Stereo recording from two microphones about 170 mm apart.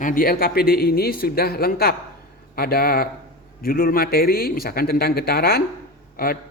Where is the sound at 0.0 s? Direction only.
55° left (ahead or behind).